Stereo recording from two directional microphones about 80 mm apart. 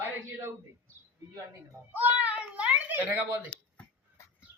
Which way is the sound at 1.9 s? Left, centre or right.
Right.